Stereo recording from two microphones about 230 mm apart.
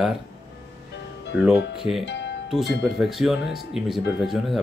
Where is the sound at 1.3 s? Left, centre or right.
Centre.